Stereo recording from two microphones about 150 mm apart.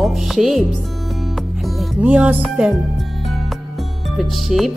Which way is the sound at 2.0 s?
10° right (ahead or behind).